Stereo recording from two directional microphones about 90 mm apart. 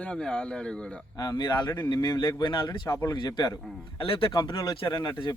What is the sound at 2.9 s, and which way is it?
Speech, 40° left (ahead or behind).